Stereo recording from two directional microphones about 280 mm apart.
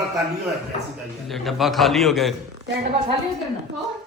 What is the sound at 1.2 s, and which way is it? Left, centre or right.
Speech, centre.